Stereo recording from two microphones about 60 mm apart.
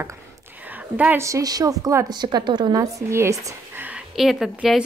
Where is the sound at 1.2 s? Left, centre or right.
Right.